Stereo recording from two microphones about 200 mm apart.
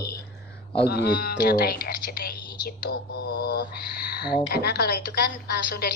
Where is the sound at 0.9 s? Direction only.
55° left (ahead or behind).